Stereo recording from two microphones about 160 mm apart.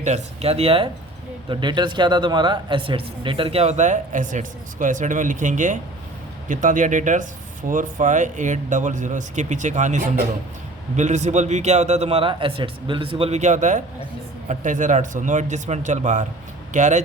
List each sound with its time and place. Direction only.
0.0 s a man's voice: 45° right (ahead or behind)